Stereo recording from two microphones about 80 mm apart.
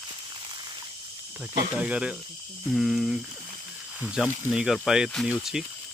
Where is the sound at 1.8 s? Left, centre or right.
Centre.